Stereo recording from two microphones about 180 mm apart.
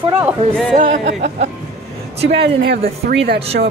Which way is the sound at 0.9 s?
45° right (ahead or behind).